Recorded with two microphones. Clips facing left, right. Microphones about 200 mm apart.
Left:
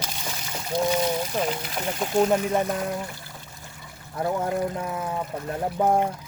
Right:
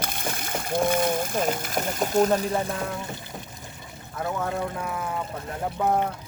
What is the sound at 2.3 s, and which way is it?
Speech, 30° right (ahead or behind).